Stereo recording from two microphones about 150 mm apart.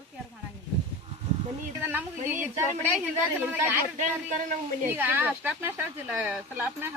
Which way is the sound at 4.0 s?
55° right (ahead or behind).